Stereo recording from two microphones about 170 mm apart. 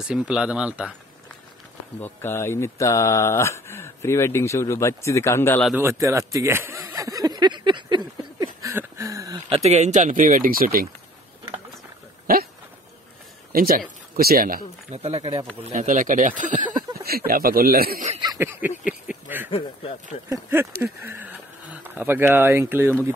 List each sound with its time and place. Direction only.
0.0 s speech: 5° right (ahead or behind)
2.0 s speech: 10° left (ahead or behind)
5.8 s a sound: 15° right (ahead or behind)
9.5 s speech: 40° right (ahead or behind); by 10.9 s 55° right (ahead or behind)
13.5 s speech: 55° right (ahead or behind)
14.9 s speech: 40° right (ahead or behind)
17.3 s speech: 60° right (ahead or behind)
18.2 s a sound: 20° right (ahead or behind)
18.9 s speech: 10° right (ahead or behind)
19.5 s speech: 35° left (ahead or behind)
20.2 s speech: 15° right (ahead or behind)